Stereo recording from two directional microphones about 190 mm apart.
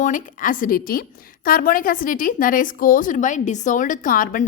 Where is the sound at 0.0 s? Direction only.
45° left (ahead or behind).